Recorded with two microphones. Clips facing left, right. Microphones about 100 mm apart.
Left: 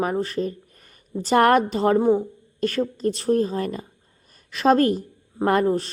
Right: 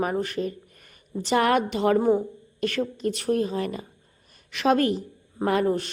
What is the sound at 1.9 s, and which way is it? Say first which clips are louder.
Speech: left 2 dB; 25° left (ahead or behind).